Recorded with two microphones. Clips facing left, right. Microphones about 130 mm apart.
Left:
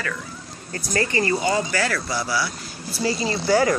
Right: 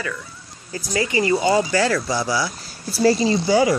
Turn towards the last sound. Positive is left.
turn(degrees=-15)  # may be behind; listen again after turning